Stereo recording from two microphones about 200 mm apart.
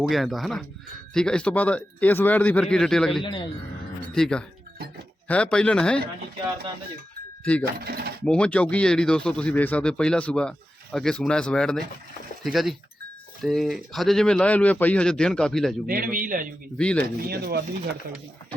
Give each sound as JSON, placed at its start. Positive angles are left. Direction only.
{"t": 0.1, "sound": "speech", "side_deg": 0}
{"t": 3.2, "sound": "speech", "side_deg": 25}
{"t": 4.1, "sound": "speech", "side_deg": 5}
{"t": 7.6, "sound": "speech", "side_deg": -50}
{"t": 8.2, "sound": "speech", "side_deg": 5}
{"t": 15.9, "sound": "speech", "side_deg": -45}
{"t": 16.7, "sound": "speech", "side_deg": 5}
{"t": 17.2, "sound": "speech", "side_deg": -50}